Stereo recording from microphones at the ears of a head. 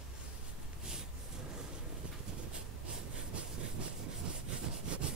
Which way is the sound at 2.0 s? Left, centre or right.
Right.